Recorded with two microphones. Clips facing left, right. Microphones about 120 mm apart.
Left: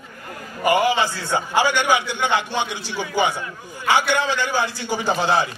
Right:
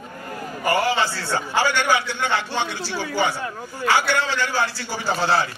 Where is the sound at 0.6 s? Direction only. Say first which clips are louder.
Left 3 dB; 15° left (ahead or behind).